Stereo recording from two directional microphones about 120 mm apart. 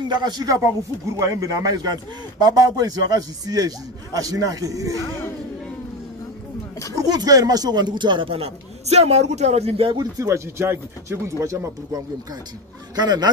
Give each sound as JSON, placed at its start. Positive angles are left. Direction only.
{"t": 0.1, "sound": "a man's voice", "side_deg": -35}
{"t": 7.0, "sound": "speech", "side_deg": -30}
{"t": 9.9, "sound": "speech", "side_deg": -25}
{"t": 12.9, "sound": "a man's voice", "side_deg": -35}